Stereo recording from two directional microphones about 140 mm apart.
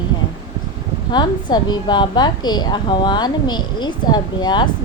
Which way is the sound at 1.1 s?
30° left (ahead or behind).